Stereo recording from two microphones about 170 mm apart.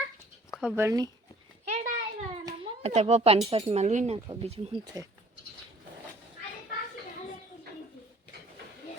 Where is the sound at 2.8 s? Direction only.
40° right (ahead or behind).